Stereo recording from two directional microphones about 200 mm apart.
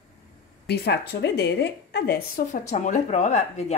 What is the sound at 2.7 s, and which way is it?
Speech, 40° left (ahead or behind).